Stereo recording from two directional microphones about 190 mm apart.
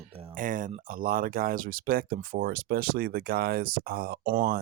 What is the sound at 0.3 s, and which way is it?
Speech, 45° right (ahead or behind).